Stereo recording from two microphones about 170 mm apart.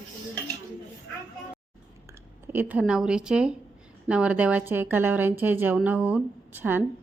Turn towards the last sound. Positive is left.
turn(degrees=-10)  # may be behind; listen again after turning